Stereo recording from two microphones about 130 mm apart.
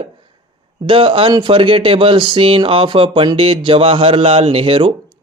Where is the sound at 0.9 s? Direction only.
40° right (ahead or behind).